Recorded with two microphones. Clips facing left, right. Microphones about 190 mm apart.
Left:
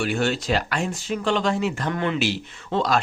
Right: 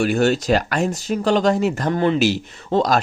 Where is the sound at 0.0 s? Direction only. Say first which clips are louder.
Right 6 dB; 40° right (ahead or behind).